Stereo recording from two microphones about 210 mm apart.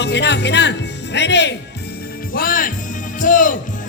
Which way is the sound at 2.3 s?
40° left (ahead or behind).